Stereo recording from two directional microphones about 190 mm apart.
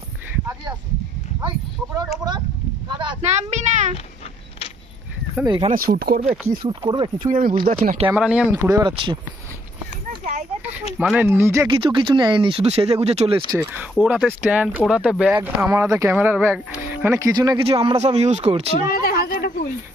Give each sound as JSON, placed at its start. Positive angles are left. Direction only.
{"t": 2.0, "sound": "a sound", "side_deg": -20}
{"t": 3.3, "sound": "a sound", "side_deg": -40}
{"t": 5.4, "sound": "speech", "side_deg": -25}
{"t": 5.8, "sound": "speech", "side_deg": -50}
{"t": 6.6, "sound": "speech", "side_deg": -20}
{"t": 7.2, "sound": "speech", "side_deg": -40}
{"t": 8.1, "sound": "speech", "side_deg": -5}
{"t": 11.0, "sound": "speech", "side_deg": -10}
{"t": 11.7, "sound": "speech", "side_deg": -25}
{"t": 13.5, "sound": "speech", "side_deg": -10}
{"t": 17.2, "sound": "speech", "side_deg": -20}
{"t": 18.9, "sound": "a sound", "side_deg": 50}